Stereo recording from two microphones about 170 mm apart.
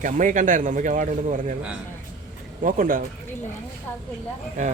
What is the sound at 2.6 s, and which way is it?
Speech, 50° right (ahead or behind).